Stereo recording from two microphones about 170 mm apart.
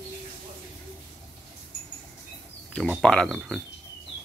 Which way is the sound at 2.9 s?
Centre (ahead or behind).